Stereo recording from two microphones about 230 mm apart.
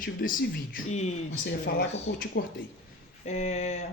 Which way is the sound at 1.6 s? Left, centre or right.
Left.